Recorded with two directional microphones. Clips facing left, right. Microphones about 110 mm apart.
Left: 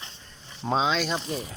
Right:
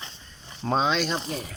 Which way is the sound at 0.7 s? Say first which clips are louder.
Right 1 dB; centre (ahead or behind).